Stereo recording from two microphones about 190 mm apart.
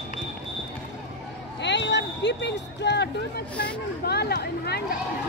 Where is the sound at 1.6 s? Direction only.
65° left (ahead or behind).